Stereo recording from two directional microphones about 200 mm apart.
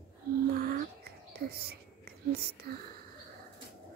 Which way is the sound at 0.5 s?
45° right (ahead or behind).